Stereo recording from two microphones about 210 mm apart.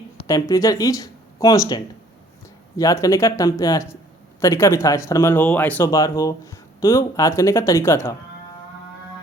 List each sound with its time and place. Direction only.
0.2 s speech: 15° left (ahead or behind)